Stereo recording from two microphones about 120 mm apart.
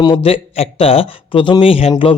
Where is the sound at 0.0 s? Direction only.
45° left (ahead or behind).